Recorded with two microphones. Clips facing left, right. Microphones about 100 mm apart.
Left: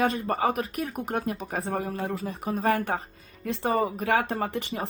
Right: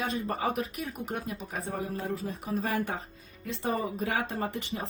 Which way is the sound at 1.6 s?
70° left (ahead or behind).